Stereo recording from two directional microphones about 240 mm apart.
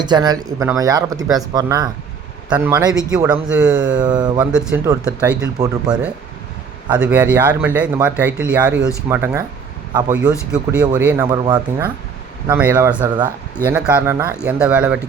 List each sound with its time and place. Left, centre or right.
0.0 s speech: centre
3.4 s speech: centre
4.0 s speech: centre
4.4 s speech: centre
10.5 s speech: centre